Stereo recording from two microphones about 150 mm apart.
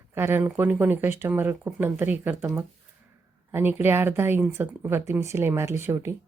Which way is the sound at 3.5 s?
15° right (ahead or behind).